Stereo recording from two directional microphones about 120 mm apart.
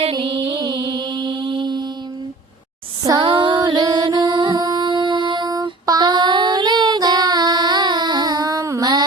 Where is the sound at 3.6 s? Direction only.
35° right (ahead or behind).